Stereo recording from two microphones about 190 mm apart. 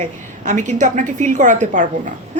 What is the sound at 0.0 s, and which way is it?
Speech, 40° right (ahead or behind).